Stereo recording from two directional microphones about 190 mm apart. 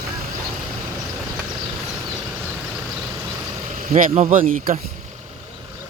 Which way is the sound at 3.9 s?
40° right (ahead or behind).